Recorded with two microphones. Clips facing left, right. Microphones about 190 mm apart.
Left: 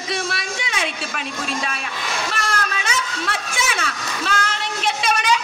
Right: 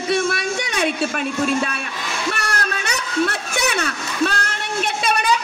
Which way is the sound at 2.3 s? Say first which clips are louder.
Even; 65° right (ahead or behind).